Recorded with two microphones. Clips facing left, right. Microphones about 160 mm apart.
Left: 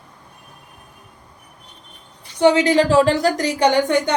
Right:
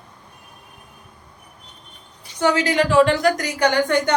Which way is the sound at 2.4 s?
20° left (ahead or behind).